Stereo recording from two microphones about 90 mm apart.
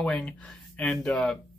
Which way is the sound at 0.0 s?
10° left (ahead or behind).